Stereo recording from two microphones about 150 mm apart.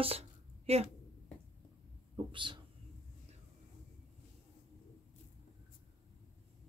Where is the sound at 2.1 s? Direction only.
35° right (ahead or behind).